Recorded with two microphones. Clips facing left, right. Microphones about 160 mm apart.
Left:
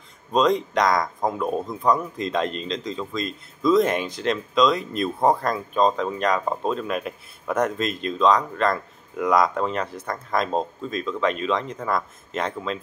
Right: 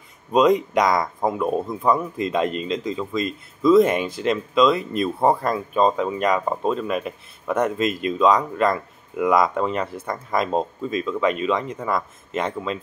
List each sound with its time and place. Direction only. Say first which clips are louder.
0.3 s speech: right 3 dB; 10° right (ahead or behind)